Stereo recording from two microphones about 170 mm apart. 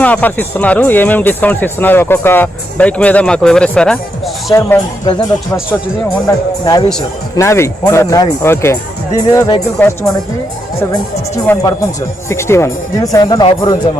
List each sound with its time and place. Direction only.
0.0 s speech: 10° left (ahead or behind)
4.5 s speech: 15° left (ahead or behind)
6.2 s speech: 20° left (ahead or behind)
11.4 s speech: 20° left (ahead or behind)